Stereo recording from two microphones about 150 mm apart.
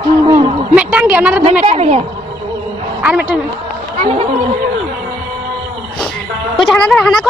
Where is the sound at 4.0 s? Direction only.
45° right (ahead or behind).